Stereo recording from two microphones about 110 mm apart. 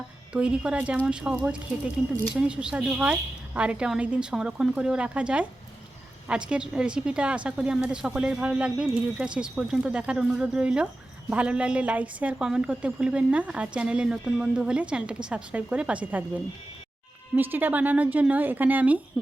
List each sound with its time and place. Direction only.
0.3 s a woman's voice: 10° right (ahead or behind)
17.3 s a woman's voice: 15° right (ahead or behind)